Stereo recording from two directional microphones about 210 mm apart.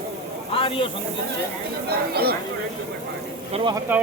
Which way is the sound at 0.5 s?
25° left (ahead or behind).